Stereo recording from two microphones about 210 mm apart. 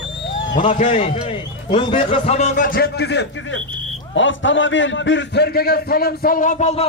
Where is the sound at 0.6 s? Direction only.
30° left (ahead or behind).